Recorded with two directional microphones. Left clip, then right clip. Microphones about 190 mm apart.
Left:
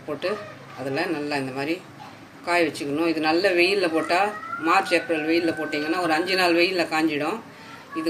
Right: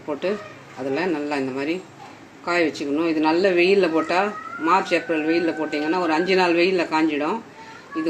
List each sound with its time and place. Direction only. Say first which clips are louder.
0.9 s speech: right 2 dB; 35° right (ahead or behind)